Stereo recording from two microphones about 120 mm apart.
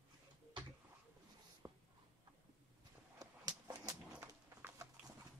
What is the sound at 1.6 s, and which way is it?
Writing, 20° right (ahead or behind).